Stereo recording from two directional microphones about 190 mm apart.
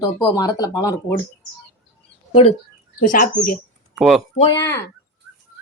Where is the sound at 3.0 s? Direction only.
45° left (ahead or behind).